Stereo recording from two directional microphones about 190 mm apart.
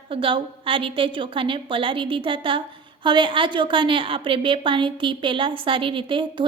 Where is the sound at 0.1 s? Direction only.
25° right (ahead or behind).